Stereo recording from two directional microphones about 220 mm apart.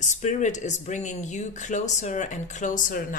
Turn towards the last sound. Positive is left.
turn(degrees=40)  # may be behind; listen again after turning